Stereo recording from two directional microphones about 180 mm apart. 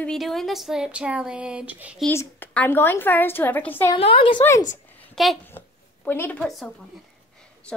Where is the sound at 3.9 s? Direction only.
30° left (ahead or behind).